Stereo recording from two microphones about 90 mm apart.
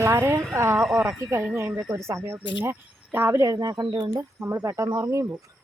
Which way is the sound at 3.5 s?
45° right (ahead or behind).